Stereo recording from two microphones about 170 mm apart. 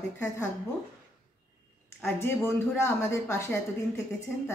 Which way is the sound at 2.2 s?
15° left (ahead or behind).